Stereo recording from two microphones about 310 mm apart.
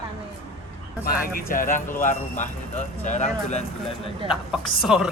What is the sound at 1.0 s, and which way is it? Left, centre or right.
Speech, left.